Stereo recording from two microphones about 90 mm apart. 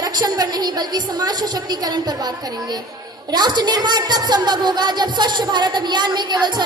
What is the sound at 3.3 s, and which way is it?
A woman's voice, 55° right (ahead or behind).